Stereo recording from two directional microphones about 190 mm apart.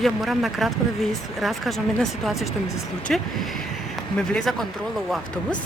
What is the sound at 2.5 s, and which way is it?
Speech, 15° left (ahead or behind).